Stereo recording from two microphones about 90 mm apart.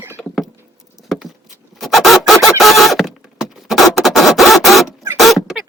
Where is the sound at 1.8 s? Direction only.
Centre (ahead or behind).